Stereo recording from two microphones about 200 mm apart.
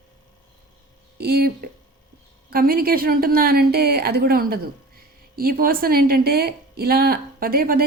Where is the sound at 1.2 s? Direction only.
50° right (ahead or behind).